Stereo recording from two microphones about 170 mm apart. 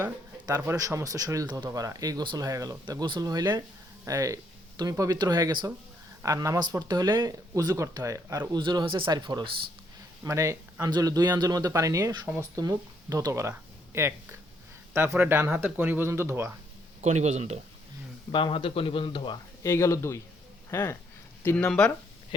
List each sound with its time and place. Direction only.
0.0 s speech: 15° right (ahead or behind)
17.0 s speech: 40° right (ahead or behind)
18.3 s a man's voice: 30° left (ahead or behind)
19.6 s speech: 15° left (ahead or behind)